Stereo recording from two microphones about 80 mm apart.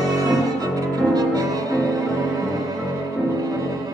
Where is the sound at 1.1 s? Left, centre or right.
Right.